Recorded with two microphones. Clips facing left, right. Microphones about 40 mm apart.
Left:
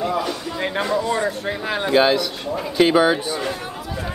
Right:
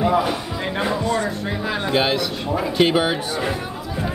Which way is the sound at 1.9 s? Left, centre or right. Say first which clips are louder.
Left 4 dB; centre.